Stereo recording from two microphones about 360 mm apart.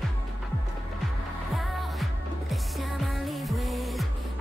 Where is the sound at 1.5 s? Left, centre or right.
Centre.